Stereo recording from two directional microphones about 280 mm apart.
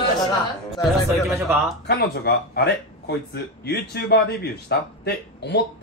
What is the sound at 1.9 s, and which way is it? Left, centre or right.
Speech, left.